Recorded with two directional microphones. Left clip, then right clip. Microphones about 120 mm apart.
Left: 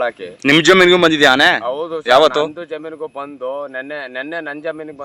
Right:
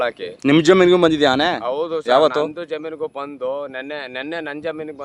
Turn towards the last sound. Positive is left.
turn(degrees=-40)  # may be behind; listen again after turning